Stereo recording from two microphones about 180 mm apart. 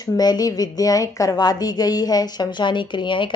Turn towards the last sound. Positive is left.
turn(degrees=25)  # may be behind; listen again after turning